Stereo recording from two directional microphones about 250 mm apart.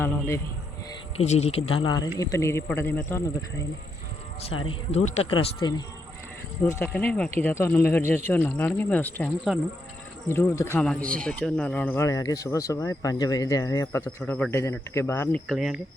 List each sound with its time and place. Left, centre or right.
0.0 s speech: centre
1.1 s speech: left
4.7 s speech: left; by 15.8 s centre